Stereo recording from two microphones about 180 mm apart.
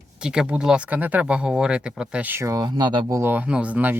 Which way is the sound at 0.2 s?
5° right (ahead or behind).